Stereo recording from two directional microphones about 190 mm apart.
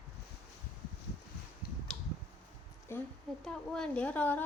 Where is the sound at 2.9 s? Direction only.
10° left (ahead or behind).